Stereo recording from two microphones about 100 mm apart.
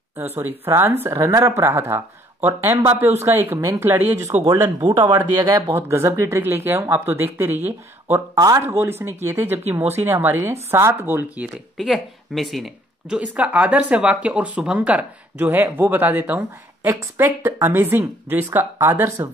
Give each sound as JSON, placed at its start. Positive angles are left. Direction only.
{"t": 0.2, "sound": "speech", "side_deg": -25}
{"t": 8.4, "sound": "speech", "side_deg": -35}
{"t": 8.6, "sound": "speech", "side_deg": -25}
{"t": 11.5, "sound": "speech", "side_deg": 0}
{"t": 13.3, "sound": "speech", "side_deg": -15}